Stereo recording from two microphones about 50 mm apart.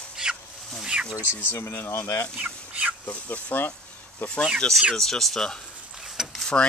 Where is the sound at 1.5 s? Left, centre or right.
Left.